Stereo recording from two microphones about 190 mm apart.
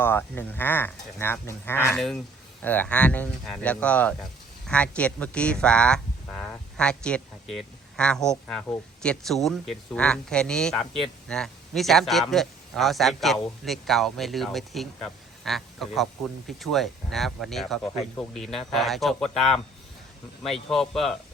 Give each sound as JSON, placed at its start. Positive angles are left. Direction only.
{"t": 0.0, "sound": "speech", "side_deg": 10}